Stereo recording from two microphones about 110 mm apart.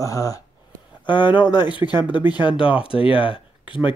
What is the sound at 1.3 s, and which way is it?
Speech, 45° left (ahead or behind).